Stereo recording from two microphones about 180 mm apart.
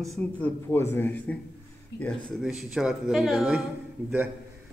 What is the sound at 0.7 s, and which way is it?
Speech, 10° left (ahead or behind).